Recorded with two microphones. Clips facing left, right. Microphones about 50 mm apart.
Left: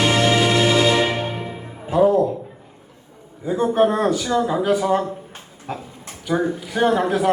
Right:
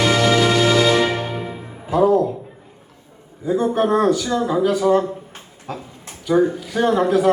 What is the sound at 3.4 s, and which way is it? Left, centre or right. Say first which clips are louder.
Speech: left 1 dB; left.